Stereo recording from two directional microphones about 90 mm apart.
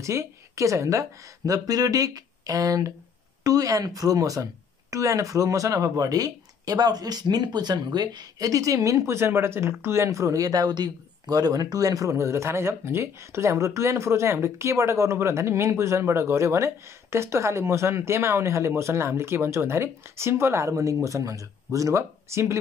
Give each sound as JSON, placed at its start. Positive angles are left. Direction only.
{"t": 0.0, "sound": "speech", "side_deg": -35}